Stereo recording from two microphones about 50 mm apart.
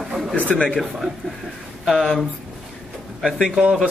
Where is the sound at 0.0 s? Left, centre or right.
Centre.